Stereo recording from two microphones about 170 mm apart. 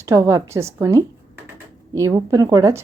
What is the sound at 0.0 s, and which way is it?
A woman's voice, 15° right (ahead or behind).